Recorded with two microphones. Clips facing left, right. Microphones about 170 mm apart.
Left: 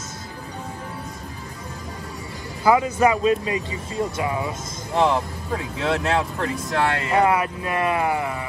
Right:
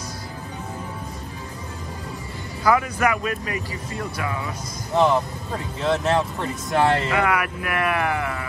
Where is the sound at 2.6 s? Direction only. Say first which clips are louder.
Left 3 dB; 25° left (ahead or behind).